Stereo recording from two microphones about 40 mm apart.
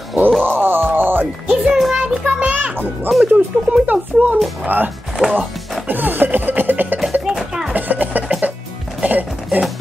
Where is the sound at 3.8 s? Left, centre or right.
Right.